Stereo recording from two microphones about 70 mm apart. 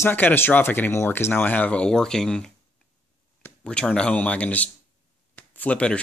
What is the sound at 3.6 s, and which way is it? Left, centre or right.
Speech, centre.